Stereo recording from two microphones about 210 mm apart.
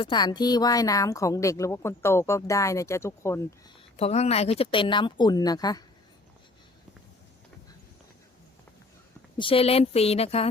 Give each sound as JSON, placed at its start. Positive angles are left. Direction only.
{"t": 0.0, "sound": "speech", "side_deg": 20}
{"t": 3.9, "sound": "speech", "side_deg": 30}
{"t": 9.4, "sound": "speech", "side_deg": 25}